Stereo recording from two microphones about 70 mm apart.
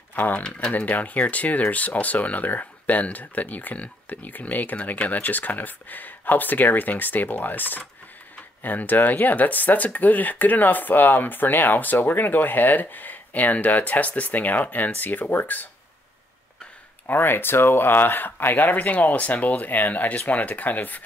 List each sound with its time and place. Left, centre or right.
0.1 s speech: left
0.4 s speech: centre
17.0 s speech: left